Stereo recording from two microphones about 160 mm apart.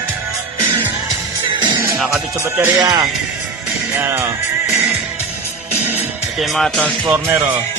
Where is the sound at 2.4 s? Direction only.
20° right (ahead or behind).